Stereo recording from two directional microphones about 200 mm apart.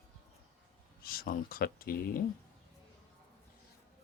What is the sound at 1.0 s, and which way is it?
Speech, 50° left (ahead or behind).